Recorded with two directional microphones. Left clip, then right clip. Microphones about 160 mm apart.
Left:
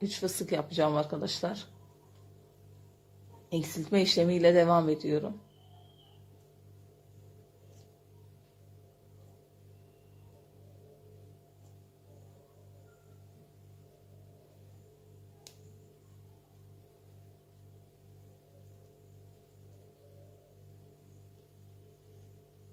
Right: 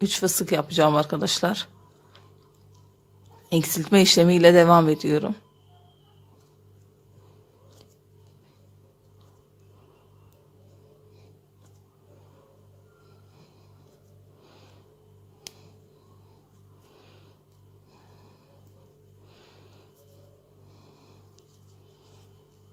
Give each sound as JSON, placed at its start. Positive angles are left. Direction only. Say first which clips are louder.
{"t": 0.0, "sound": "speech", "louder": "right 9 dB", "side_deg": -35}
{"t": 3.5, "sound": "speech", "louder": "right 9 dB", "side_deg": -35}